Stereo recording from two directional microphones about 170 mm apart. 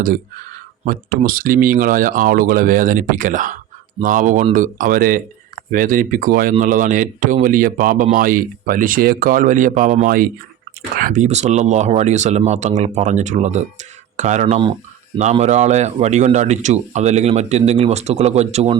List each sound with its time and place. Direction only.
0.0 s speech: 55° right (ahead or behind)
14.4 s speech: 30° right (ahead or behind)
15.2 s a man's voice: 40° right (ahead or behind)